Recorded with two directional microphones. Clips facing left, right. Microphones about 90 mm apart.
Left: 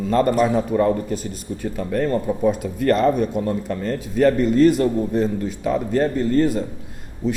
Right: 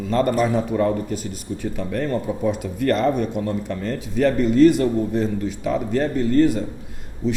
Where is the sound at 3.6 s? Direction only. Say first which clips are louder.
Left 2 dB; 40° left (ahead or behind).